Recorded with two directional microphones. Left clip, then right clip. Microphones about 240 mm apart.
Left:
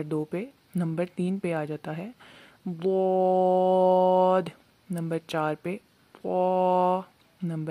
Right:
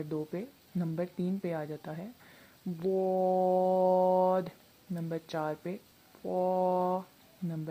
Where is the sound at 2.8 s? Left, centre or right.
Centre.